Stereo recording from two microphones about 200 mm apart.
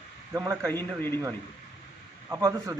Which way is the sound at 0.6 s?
10° left (ahead or behind).